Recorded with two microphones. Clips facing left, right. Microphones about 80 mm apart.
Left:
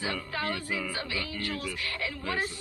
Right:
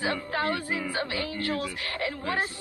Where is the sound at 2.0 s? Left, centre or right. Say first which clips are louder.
Right 4 dB; right.